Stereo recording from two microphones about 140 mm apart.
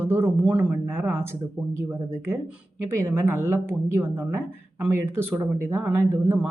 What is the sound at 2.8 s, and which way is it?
Speech, 20° right (ahead or behind).